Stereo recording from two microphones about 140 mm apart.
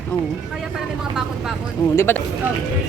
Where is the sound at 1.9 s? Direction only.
15° left (ahead or behind).